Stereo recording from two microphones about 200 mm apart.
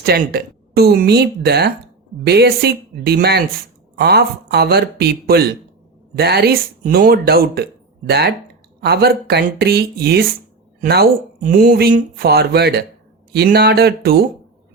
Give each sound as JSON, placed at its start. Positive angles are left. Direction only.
{"t": 0.0, "sound": "speech", "side_deg": -50}